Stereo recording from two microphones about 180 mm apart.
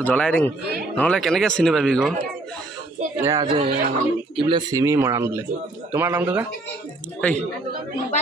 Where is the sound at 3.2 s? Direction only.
20° right (ahead or behind).